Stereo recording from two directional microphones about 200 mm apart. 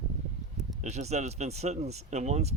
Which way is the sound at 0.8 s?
35° right (ahead or behind).